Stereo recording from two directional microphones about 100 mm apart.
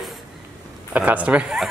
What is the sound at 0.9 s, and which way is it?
Speech, 15° right (ahead or behind).